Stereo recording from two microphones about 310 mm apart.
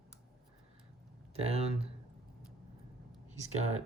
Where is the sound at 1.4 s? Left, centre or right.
Centre.